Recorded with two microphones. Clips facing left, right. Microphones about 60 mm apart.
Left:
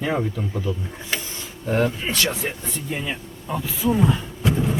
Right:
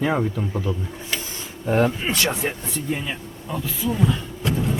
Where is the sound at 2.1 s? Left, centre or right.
Right.